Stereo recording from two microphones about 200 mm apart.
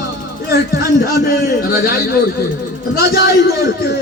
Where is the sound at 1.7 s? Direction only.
50° left (ahead or behind).